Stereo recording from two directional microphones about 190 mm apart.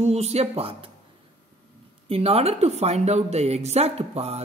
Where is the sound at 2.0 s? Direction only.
30° right (ahead or behind).